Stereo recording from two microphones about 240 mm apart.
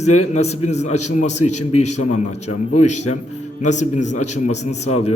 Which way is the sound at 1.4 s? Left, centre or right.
Left.